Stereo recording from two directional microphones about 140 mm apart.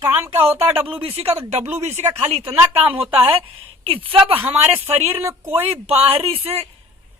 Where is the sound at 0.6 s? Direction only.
45° right (ahead or behind).